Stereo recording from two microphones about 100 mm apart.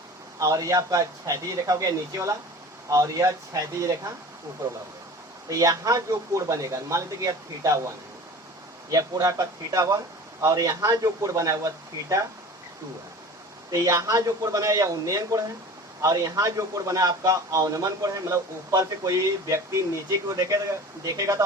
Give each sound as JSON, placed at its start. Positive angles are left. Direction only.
{"t": 0.3, "sound": "a man's voice", "side_deg": -35}
{"t": 5.5, "sound": "a man's voice", "side_deg": -35}
{"t": 13.7, "sound": "a man's voice", "side_deg": -35}